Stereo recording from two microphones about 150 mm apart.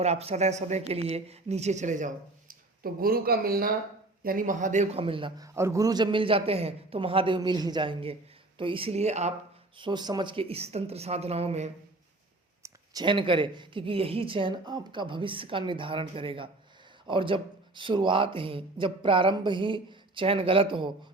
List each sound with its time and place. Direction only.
0.0 s speech: 45° right (ahead or behind); by 3.7 s 85° right
4.2 s speech: 70° right (ahead or behind); by 5.3 s 35° right (ahead or behind)
5.4 s a man's voice: 20° right (ahead or behind); by 9.3 s 45° right (ahead or behind)
9.7 s speech: 30° right (ahead or behind)
12.6 s a man's voice: 25° right (ahead or behind)